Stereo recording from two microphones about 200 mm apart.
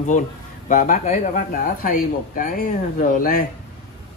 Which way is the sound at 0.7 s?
40° left (ahead or behind).